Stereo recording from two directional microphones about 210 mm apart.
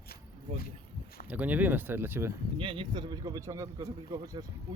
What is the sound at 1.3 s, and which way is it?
A man's voice, 5° right (ahead or behind).